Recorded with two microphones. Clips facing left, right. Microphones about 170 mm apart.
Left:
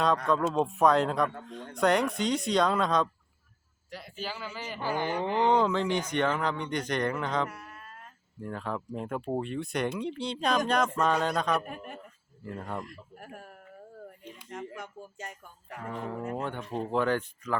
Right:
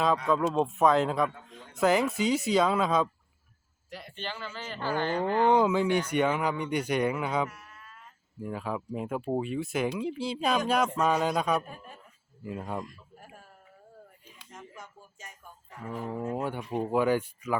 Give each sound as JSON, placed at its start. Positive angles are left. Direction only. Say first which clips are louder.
{"t": 0.3, "sound": "a man's voice", "louder": "right 1 dB", "side_deg": 0}
{"t": 5.5, "sound": "speech", "louder": "right 2 dB", "side_deg": -10}
{"t": 7.5, "sound": "a sound", "louder": "left 5 dB", "side_deg": 65}
{"t": 8.4, "sound": "speech", "louder": "right 1 dB", "side_deg": -5}
{"t": 11.6, "sound": "speech", "louder": "left 5 dB", "side_deg": 70}
{"t": 12.5, "sound": "speech", "louder": "right 2 dB", "side_deg": -10}
{"t": 12.8, "sound": "speech", "louder": "left 1 dB", "side_deg": 65}
{"t": 15.9, "sound": "speech", "louder": "right 2 dB", "side_deg": -5}